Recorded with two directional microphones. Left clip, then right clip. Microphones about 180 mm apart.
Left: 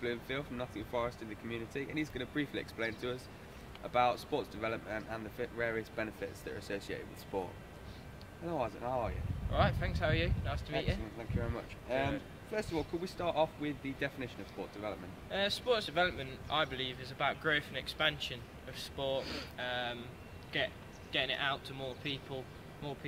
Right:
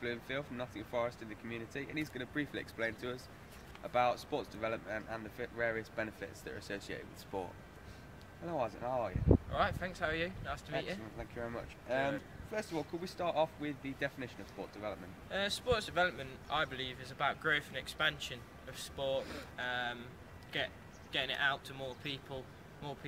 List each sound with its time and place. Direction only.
0.0 s speech: 40° right (ahead or behind)
8.5 s speech: 40° right (ahead or behind)
9.5 s a man's voice: 5° right (ahead or behind)
11.1 s speech: 35° right (ahead or behind)
15.2 s a man's voice: 5° right (ahead or behind)